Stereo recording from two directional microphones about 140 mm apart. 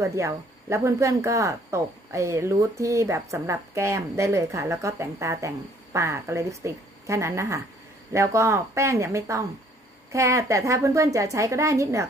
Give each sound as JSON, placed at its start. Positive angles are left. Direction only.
{"t": 0.0, "sound": "speech", "side_deg": -20}